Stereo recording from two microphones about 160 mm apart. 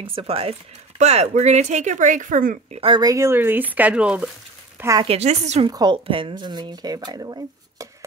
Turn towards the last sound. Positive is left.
turn(degrees=-25)  # may be behind; listen again after turning